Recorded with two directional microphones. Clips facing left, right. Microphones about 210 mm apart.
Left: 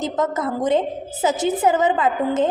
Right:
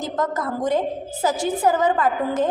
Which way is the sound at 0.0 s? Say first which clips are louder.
Left 2 dB; 20° left (ahead or behind).